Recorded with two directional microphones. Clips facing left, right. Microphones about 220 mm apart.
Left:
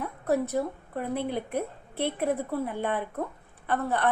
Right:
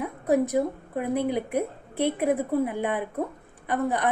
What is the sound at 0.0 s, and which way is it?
A woman's voice, 15° right (ahead or behind).